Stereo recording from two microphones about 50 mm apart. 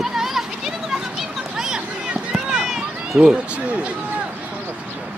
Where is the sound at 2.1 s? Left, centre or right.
Centre.